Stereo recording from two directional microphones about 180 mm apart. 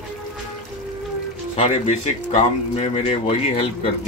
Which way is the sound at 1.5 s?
35° left (ahead or behind).